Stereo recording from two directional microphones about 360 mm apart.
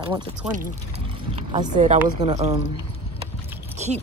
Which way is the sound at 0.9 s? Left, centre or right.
Centre.